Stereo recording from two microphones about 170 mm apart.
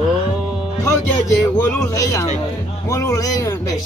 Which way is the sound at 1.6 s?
20° left (ahead or behind).